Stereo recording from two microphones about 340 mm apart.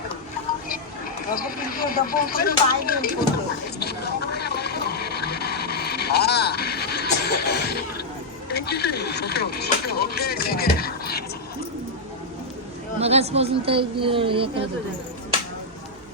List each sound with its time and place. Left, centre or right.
1.3 s speech: left
3.8 s vehicle: left
8.4 s speech: left
13.0 s speech: centre